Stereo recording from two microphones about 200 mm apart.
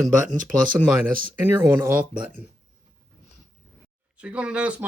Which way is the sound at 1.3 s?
10° right (ahead or behind).